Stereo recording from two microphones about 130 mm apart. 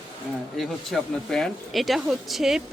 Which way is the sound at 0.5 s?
5° left (ahead or behind).